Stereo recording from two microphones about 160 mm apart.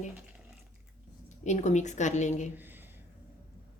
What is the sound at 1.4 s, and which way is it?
Speech, 45° left (ahead or behind).